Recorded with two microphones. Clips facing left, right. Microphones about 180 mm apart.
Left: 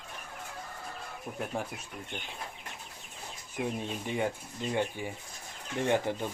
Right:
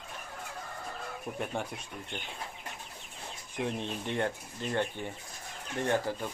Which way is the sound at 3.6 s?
10° left (ahead or behind).